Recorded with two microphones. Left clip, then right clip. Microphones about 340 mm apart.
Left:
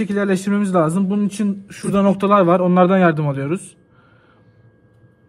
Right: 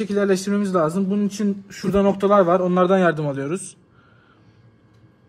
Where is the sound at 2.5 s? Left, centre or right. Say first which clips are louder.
Left 3 dB; left.